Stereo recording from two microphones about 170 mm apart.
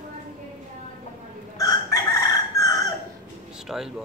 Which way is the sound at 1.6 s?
20° left (ahead or behind).